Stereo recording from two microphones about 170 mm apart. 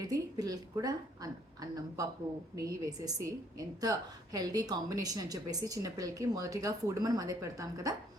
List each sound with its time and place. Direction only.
0.0 s a woman's voice: 20° right (ahead or behind)
2.6 s a woman's voice: 20° right (ahead or behind)